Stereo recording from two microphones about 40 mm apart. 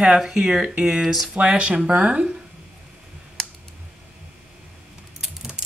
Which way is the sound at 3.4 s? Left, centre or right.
Centre.